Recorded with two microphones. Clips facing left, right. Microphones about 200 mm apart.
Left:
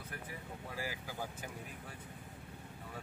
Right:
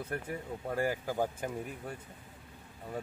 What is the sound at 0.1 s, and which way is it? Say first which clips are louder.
Speech: right 8 dB; 50° right (ahead or behind).